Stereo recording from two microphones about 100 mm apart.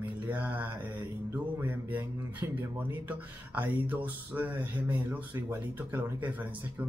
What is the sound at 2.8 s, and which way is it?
Speech, 15° right (ahead or behind).